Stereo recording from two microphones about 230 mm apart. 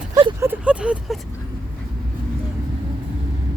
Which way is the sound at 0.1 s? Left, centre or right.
Centre.